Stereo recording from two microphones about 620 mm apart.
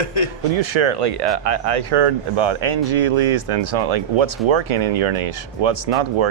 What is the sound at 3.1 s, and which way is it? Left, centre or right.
Speech, right.